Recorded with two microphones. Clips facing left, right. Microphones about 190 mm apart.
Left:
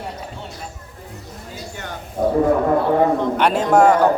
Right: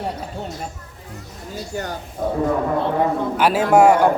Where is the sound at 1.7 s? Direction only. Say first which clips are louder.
Right 7 dB; 35° right (ahead or behind).